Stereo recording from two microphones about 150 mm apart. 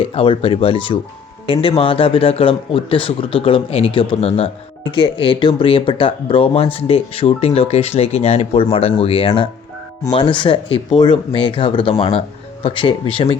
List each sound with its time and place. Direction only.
0.1 s a man's voice: 35° left (ahead or behind)